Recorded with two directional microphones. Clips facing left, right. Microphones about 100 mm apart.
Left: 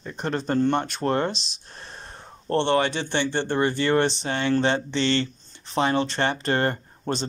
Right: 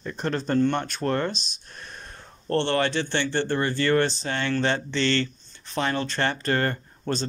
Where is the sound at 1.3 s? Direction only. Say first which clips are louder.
Left 1 dB; 90° left.